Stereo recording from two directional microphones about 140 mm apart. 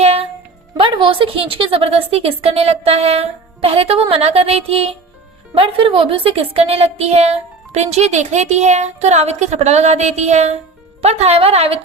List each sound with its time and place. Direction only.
0.0 s music: 45° right (ahead or behind)
0.8 s a woman's voice: 35° right (ahead or behind)